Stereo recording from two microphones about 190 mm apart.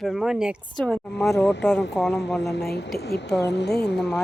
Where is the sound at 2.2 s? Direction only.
65° left (ahead or behind).